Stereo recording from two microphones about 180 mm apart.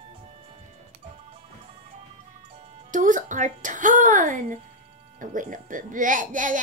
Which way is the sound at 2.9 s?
45° right (ahead or behind).